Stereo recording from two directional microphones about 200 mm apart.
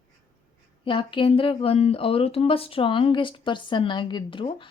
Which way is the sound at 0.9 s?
25° left (ahead or behind).